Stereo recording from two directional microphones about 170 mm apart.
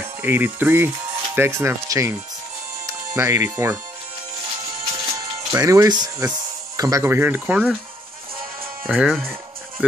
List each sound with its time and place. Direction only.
0.2 s speech: 10° right (ahead or behind)
5.5 s speech: 20° right (ahead or behind)
8.8 s speech: centre (ahead or behind)